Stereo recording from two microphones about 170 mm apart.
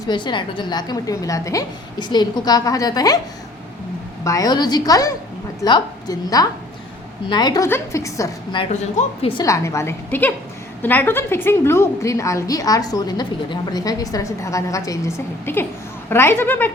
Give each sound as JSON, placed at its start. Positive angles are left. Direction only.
{"t": 0.1, "sound": "a woman's voice", "side_deg": 25}
{"t": 4.2, "sound": "a woman's voice", "side_deg": 20}
{"t": 8.7, "sound": "speech", "side_deg": 45}
{"t": 9.3, "sound": "a woman's voice", "side_deg": 20}